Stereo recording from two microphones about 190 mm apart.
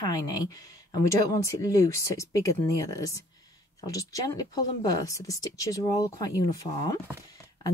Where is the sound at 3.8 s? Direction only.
20° left (ahead or behind).